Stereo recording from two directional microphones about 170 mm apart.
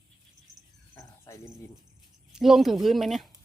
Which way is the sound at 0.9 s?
20° left (ahead or behind).